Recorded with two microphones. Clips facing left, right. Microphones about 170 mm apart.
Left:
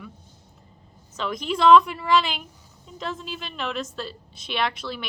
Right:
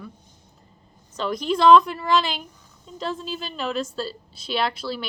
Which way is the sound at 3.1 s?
Centre (ahead or behind).